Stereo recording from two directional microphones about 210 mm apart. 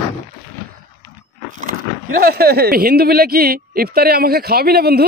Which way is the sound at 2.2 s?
45° right (ahead or behind).